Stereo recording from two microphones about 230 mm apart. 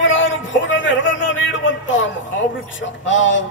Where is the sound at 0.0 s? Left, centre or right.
Left.